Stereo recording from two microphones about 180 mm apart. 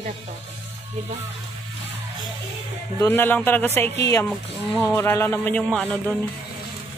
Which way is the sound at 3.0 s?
10° left (ahead or behind).